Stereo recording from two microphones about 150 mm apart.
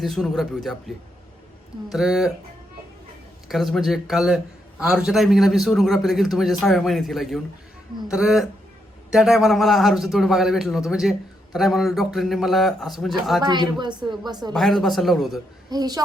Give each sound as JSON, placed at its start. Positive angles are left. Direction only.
{"t": 0.0, "sound": "a man's voice", "side_deg": 0}
{"t": 3.5, "sound": "a man's voice", "side_deg": 0}
{"t": 13.4, "sound": "a woman's voice", "side_deg": -30}
{"t": 14.5, "sound": "a man's voice", "side_deg": 0}
{"t": 15.7, "sound": "a woman's voice", "side_deg": -25}